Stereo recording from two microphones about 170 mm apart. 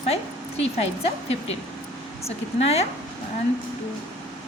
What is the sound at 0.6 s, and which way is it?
A woman's voice, 35° left (ahead or behind).